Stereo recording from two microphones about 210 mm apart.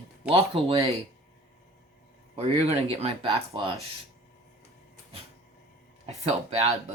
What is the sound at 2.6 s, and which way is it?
Speech, 30° right (ahead or behind).